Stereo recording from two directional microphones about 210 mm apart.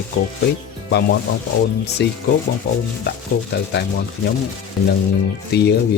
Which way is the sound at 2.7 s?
55° left (ahead or behind).